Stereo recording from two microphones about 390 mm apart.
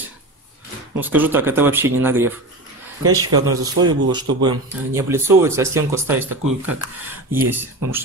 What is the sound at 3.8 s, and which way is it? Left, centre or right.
Speech, centre.